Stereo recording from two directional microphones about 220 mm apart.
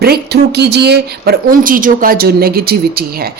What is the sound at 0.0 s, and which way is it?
A woman's voice, 45° right (ahead or behind).